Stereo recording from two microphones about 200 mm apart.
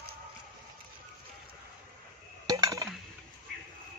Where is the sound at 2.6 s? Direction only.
15° right (ahead or behind).